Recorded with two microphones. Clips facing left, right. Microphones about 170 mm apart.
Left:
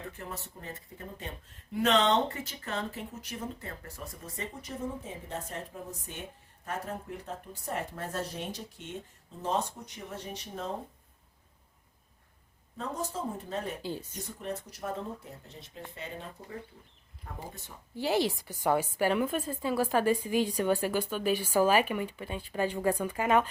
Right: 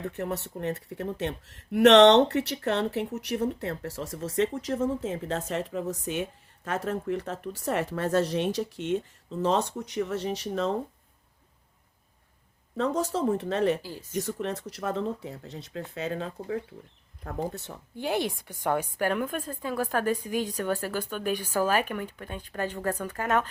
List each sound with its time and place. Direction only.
0.0 s speech: 70° right (ahead or behind); by 10.8 s 90° right
12.7 s a woman's voice: 80° right
17.2 s speech: 70° right (ahead or behind)
18.0 s speech: centre (ahead or behind)